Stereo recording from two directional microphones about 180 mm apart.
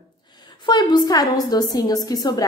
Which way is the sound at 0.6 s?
25° left (ahead or behind).